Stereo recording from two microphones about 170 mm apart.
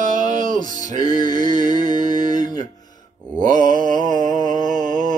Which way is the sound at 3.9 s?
50° right (ahead or behind).